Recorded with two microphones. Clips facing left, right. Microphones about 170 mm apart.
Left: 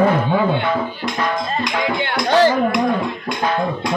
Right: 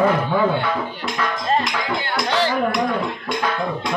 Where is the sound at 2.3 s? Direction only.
45° left (ahead or behind).